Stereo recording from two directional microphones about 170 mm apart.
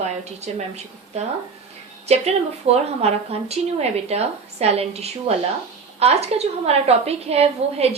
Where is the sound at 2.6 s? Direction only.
40° right (ahead or behind).